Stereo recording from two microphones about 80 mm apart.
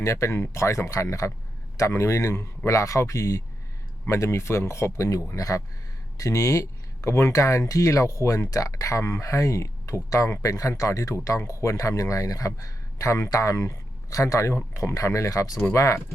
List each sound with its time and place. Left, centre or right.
0.0 s speech: left